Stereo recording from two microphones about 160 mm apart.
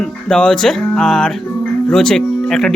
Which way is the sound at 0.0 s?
5° left (ahead or behind).